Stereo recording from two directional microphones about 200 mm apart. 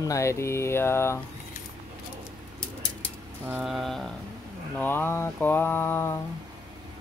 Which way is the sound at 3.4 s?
5° right (ahead or behind).